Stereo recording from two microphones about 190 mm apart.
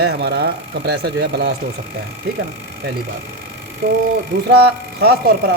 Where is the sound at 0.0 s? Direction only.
60° right (ahead or behind).